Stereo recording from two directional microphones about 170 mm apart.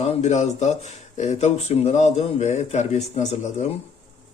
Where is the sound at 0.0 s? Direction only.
40° left (ahead or behind).